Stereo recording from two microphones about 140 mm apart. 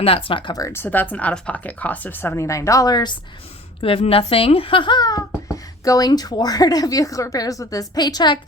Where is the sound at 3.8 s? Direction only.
40° left (ahead or behind).